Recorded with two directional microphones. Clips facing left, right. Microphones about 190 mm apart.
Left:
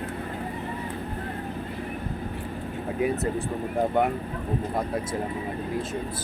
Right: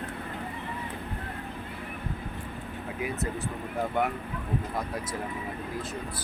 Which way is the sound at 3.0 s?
35° left (ahead or behind).